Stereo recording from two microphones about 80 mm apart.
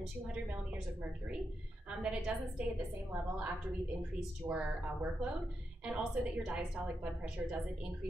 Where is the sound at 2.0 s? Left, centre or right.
Centre.